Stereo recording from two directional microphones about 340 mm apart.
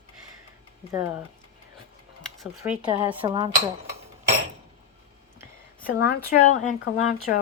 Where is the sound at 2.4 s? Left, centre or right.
Centre.